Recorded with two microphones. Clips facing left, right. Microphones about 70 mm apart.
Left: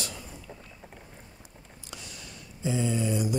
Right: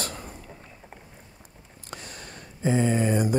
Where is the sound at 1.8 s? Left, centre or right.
Right.